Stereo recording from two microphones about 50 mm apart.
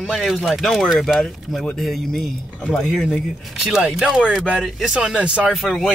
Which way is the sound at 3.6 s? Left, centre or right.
Centre.